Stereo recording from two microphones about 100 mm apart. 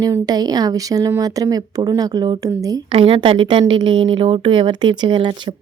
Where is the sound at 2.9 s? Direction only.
60° right (ahead or behind).